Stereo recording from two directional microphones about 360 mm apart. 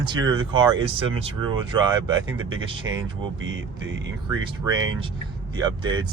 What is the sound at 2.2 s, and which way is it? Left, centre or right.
Speech, right.